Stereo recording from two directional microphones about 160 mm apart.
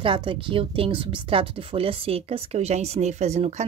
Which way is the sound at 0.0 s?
30° right (ahead or behind).